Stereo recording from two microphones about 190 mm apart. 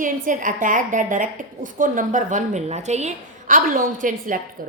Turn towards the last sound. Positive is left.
turn(degrees=-45)  # may be behind; listen again after turning